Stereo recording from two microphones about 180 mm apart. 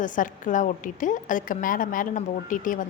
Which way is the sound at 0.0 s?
45° left (ahead or behind).